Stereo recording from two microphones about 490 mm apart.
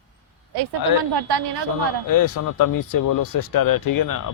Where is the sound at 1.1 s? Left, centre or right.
Right.